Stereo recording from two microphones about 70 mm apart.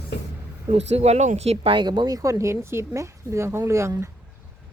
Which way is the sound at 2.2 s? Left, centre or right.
Right.